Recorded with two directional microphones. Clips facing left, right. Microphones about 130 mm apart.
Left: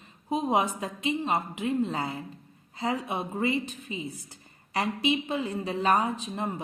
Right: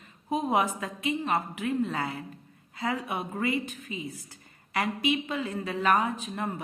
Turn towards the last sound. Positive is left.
turn(degrees=20)  # may be behind; listen again after turning